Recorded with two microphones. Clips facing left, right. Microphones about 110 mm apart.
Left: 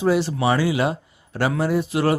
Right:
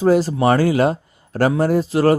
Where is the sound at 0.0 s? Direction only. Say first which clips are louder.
Right 4 dB; 40° right (ahead or behind).